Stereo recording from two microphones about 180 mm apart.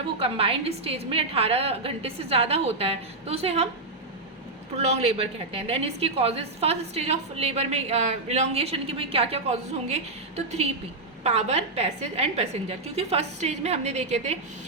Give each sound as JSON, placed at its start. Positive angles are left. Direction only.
{"t": 0.2, "sound": "a woman's voice", "side_deg": -30}
{"t": 4.8, "sound": "a woman's voice", "side_deg": -35}